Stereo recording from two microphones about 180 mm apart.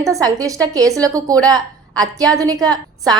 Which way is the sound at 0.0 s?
20° right (ahead or behind).